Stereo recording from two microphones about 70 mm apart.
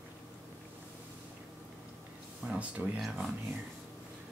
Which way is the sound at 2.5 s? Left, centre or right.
Centre.